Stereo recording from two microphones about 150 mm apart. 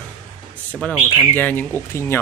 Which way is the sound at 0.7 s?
10° left (ahead or behind).